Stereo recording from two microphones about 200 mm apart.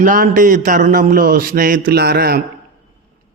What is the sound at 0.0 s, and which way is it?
A man's voice, 40° right (ahead or behind).